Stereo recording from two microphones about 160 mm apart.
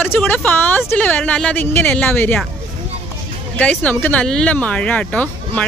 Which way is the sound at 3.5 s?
10° left (ahead or behind).